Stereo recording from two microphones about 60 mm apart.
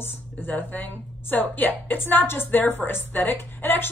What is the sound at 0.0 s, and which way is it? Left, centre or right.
A woman's voice, left.